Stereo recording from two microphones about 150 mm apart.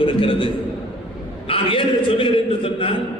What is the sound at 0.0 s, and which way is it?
A man's voice, 35° left (ahead or behind).